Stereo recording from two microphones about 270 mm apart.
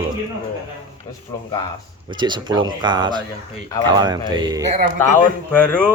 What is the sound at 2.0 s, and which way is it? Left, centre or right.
A man's voice, centre.